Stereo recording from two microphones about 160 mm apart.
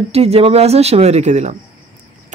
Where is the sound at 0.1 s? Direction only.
40° right (ahead or behind).